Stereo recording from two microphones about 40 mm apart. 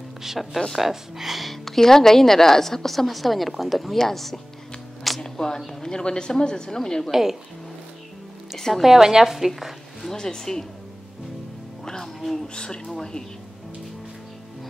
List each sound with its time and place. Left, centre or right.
0.2 s a woman's voice: centre
5.2 s a sound: centre
5.7 s speech: centre
7.1 s a woman's voice: centre
8.5 s speech: centre
8.8 s a woman's voice: centre
9.5 s a sound: centre
10.1 s speech: centre
11.8 s music: centre
12.5 s speech: centre